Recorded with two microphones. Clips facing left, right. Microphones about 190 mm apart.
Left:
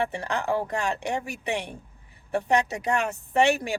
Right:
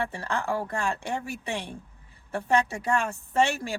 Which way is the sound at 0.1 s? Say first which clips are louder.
Left 2 dB; 20° left (ahead or behind).